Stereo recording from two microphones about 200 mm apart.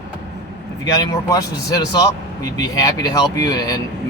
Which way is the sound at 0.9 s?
15° left (ahead or behind).